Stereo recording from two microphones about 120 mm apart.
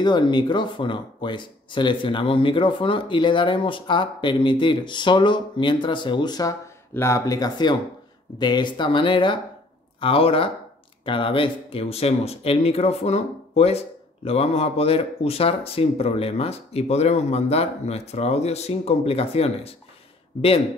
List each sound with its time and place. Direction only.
0.0 s speech: 40° left (ahead or behind)
6.9 s speech: 20° left (ahead or behind); by 19.7 s 55° left (ahead or behind)